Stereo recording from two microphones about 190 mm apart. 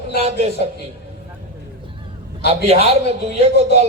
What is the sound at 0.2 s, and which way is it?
Speech, 35° right (ahead or behind).